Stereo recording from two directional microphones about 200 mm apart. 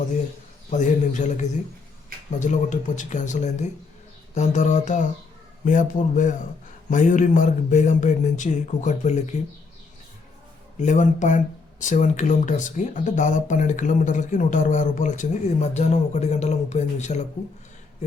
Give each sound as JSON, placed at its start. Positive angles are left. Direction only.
{"t": 0.7, "sound": "speech", "side_deg": 35}
{"t": 10.8, "sound": "speech", "side_deg": 40}